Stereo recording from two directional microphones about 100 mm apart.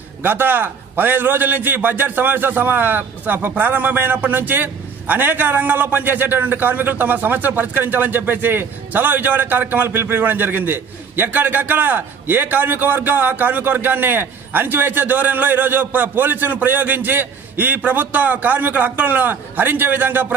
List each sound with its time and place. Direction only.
0.2 s a man's voice: 20° right (ahead or behind)